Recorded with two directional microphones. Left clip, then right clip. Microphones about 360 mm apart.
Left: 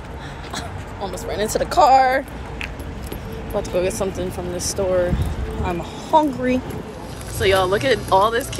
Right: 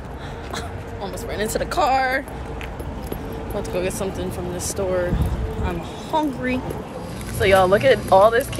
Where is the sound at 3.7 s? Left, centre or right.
Centre.